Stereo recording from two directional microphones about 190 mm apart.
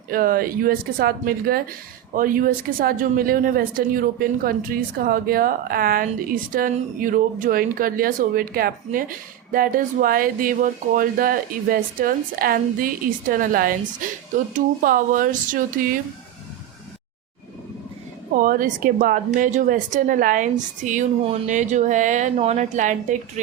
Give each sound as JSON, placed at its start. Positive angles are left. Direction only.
{"t": 0.1, "sound": "a woman's voice", "side_deg": -50}
{"t": 18.3, "sound": "a woman's voice", "side_deg": -45}